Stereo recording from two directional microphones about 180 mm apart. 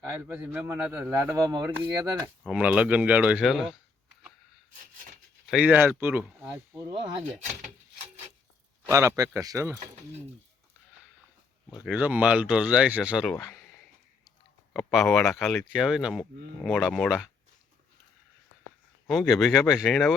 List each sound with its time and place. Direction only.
0.0 s speech: 10° right (ahead or behind)
5.5 s speech: 5° right (ahead or behind)
8.9 s speech: 15° right (ahead or behind)
11.7 s speech: 5° right (ahead or behind)
13.3 s speech: 20° left (ahead or behind)
14.7 s speech: 5° left (ahead or behind)
19.0 s speech: centre (ahead or behind)